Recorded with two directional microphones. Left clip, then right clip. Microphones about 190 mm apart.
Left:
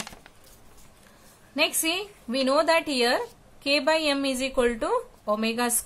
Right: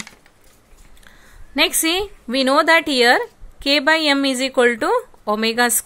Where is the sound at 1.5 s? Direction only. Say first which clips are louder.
Right 7 dB; 40° right (ahead or behind).